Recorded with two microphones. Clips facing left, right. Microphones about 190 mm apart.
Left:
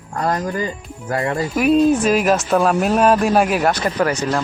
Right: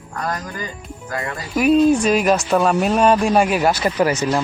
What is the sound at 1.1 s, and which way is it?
Speech, 30° left (ahead or behind).